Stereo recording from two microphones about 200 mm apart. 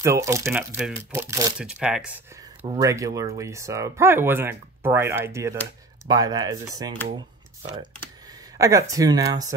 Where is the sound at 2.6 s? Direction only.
15° right (ahead or behind).